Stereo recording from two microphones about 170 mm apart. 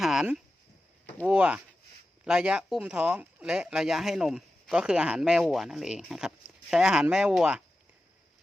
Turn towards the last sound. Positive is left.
turn(degrees=-5)  # may be behind; listen again after turning